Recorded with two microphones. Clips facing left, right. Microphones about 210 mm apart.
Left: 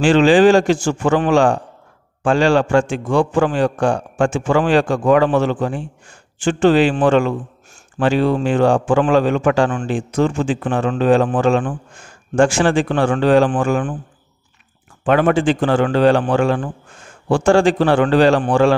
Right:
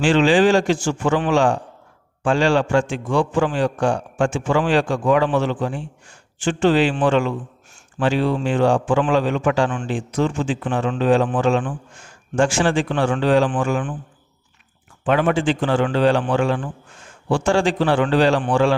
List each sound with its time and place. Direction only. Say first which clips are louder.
0.0 s a man's voice: left 4 dB; 45° left (ahead or behind)
15.0 s a man's voice: left 4 dB; 50° left (ahead or behind)